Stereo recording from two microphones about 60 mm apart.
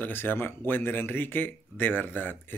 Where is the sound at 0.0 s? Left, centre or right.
Left.